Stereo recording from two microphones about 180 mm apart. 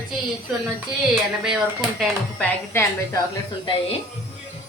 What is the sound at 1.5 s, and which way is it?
Speech, centre (ahead or behind).